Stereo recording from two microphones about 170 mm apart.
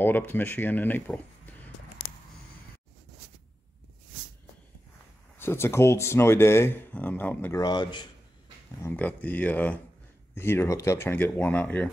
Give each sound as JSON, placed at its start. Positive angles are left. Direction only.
{"t": 0.0, "sound": "speech", "side_deg": 10}
{"t": 5.4, "sound": "speech", "side_deg": 15}
{"t": 7.6, "sound": "a man's voice", "side_deg": 25}
{"t": 8.8, "sound": "speech", "side_deg": 10}